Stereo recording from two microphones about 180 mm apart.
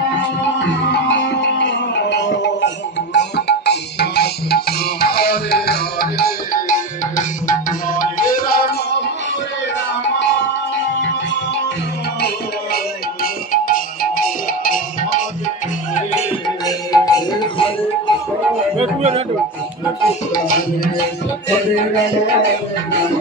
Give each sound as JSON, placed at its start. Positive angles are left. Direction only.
{"t": 1.0, "sound": "music", "side_deg": 80}
{"t": 12.7, "sound": "music", "side_deg": 50}
{"t": 16.4, "sound": "music", "side_deg": 20}
{"t": 18.8, "sound": "music", "side_deg": -35}
{"t": 20.3, "sound": "tabla", "side_deg": 50}